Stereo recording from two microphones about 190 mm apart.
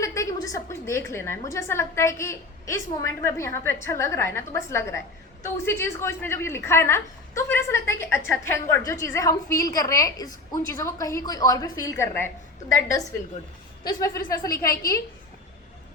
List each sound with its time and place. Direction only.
0.0 s a woman's voice: 15° left (ahead or behind)
14.5 s a woman's voice: 50° left (ahead or behind)